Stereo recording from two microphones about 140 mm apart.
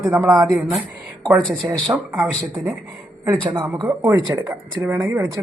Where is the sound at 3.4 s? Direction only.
30° right (ahead or behind).